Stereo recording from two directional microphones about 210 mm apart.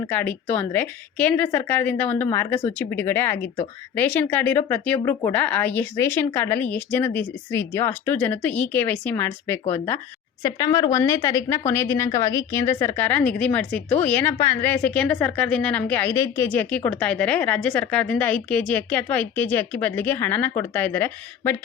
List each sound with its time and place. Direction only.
0.1 s a woman's voice: 10° left (ahead or behind)